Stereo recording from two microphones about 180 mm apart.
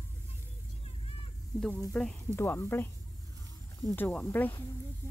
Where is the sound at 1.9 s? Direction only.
5° left (ahead or behind).